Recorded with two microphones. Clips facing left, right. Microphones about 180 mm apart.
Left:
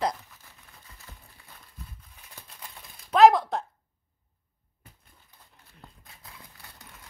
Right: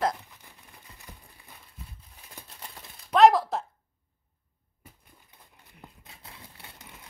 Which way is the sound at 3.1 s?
Centre (ahead or behind).